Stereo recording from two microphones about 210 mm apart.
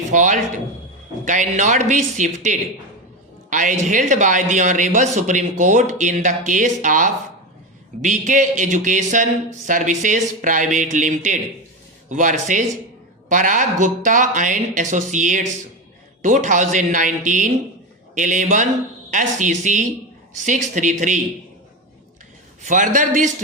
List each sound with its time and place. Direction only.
0.1 s speech: 35° right (ahead or behind)
22.6 s speech: 35° right (ahead or behind)